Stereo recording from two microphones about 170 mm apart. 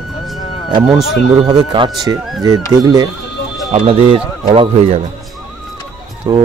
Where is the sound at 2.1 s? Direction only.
20° right (ahead or behind).